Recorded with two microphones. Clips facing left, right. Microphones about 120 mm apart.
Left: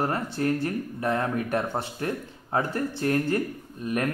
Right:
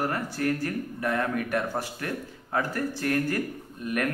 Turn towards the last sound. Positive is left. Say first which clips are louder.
# left 1 dB
turn(degrees=30)  # may be behind; listen again after turning